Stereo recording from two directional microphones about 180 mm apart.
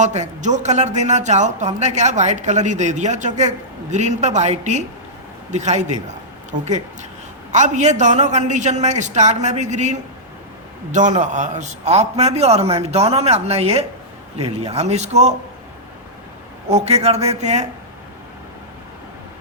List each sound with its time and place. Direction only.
0.0 s speech: 40° right (ahead or behind)
7.5 s speech: 40° right (ahead or behind)
16.6 s speech: 35° right (ahead or behind)